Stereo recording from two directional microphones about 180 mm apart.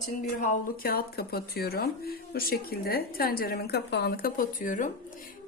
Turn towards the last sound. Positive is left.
turn(degrees=45)  # may be behind; listen again after turning